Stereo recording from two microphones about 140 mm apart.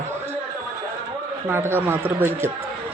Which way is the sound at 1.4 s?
15° right (ahead or behind).